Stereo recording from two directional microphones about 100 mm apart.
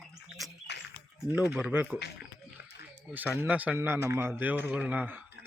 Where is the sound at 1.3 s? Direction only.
10° right (ahead or behind).